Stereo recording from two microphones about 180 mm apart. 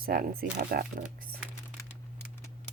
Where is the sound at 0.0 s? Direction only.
55° right (ahead or behind).